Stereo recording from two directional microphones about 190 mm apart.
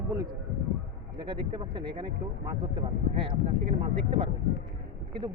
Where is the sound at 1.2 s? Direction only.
25° right (ahead or behind).